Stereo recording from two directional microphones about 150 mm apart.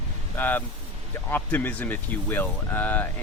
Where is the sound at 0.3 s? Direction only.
10° left (ahead or behind).